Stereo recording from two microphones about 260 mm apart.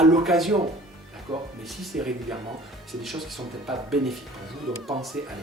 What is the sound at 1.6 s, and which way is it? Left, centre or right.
Speech, centre.